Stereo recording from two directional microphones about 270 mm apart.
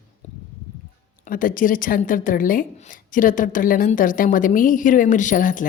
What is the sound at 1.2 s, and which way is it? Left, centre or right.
Speech, left.